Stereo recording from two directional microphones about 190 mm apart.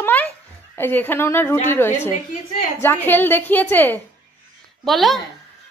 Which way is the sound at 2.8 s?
10° left (ahead or behind).